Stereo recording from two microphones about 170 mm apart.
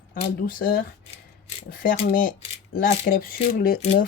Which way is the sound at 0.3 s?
55° left (ahead or behind).